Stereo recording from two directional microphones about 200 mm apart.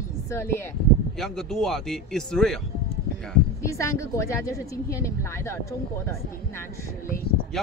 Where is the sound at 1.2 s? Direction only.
Centre (ahead or behind).